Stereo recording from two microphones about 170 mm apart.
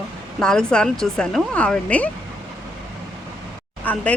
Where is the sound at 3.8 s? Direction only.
10° left (ahead or behind).